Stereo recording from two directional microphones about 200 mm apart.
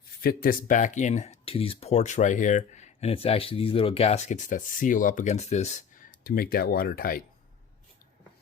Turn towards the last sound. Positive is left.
turn(degrees=45)  # may be behind; listen again after turning